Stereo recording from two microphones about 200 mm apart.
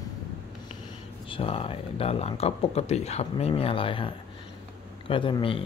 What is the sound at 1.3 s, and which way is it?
Speech, 25° left (ahead or behind).